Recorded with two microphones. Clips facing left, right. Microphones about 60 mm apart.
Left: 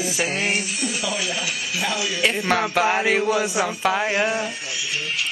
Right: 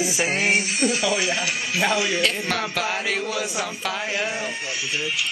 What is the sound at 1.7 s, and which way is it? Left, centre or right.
Speech, right.